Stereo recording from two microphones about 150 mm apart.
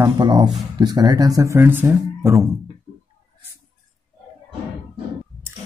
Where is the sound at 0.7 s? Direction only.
25° right (ahead or behind).